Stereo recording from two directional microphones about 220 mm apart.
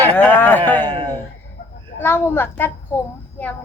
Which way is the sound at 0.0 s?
10° left (ahead or behind).